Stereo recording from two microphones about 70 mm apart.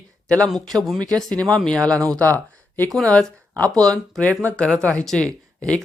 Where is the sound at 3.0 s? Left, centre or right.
Centre.